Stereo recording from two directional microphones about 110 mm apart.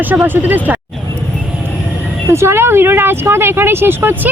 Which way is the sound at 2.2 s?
25° right (ahead or behind).